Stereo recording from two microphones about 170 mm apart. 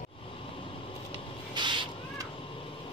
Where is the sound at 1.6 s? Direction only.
25° right (ahead or behind).